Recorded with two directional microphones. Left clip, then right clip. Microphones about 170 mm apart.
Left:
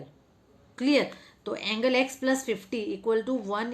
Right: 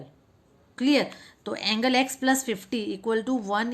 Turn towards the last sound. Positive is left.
turn(degrees=-35)  # may be behind; listen again after turning